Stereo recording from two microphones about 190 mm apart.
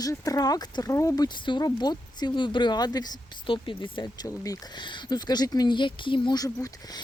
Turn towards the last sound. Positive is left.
turn(degrees=20)  # may be behind; listen again after turning